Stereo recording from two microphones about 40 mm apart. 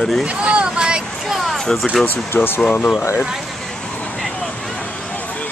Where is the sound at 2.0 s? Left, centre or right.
Left.